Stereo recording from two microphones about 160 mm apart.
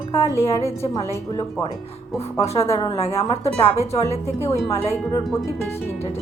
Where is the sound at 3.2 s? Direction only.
40° left (ahead or behind).